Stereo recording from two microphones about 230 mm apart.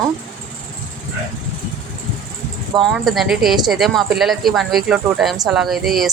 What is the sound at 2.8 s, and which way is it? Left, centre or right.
A woman's voice, centre.